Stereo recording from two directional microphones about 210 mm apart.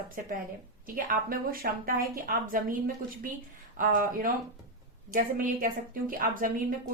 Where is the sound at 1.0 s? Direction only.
40° right (ahead or behind).